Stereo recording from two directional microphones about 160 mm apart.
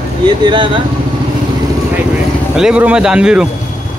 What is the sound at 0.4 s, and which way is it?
Speech, 30° right (ahead or behind).